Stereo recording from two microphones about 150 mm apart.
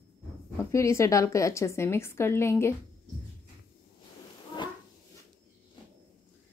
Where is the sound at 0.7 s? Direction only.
20° left (ahead or behind).